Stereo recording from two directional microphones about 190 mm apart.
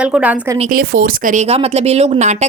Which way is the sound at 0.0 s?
5° right (ahead or behind).